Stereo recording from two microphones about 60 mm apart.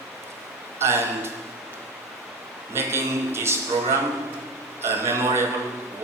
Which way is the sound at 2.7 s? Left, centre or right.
Right.